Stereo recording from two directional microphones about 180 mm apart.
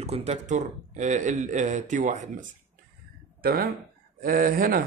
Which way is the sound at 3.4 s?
60° right (ahead or behind).